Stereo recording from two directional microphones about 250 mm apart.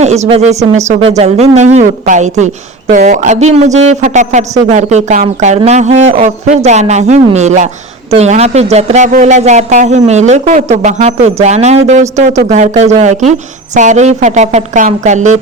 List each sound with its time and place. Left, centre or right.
0.0 s a man's voice: right